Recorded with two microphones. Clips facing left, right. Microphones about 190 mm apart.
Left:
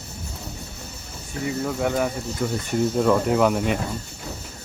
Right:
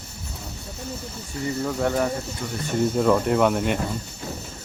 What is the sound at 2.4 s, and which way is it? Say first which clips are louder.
Speech: left 6 dB; 55° left (ahead or behind).